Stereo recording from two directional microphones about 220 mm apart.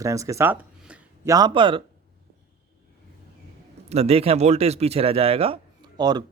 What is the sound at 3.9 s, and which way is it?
Speech, 30° right (ahead or behind).